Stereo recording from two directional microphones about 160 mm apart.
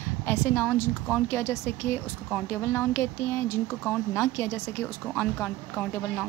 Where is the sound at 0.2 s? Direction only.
15° left (ahead or behind).